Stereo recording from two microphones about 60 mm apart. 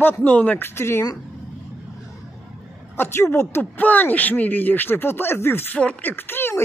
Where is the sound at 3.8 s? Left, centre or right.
Left.